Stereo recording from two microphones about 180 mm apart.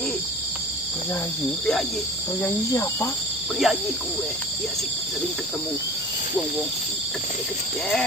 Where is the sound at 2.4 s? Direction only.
15° left (ahead or behind).